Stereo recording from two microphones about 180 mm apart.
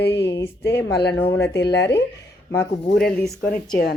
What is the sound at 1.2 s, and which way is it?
Speech, 10° left (ahead or behind).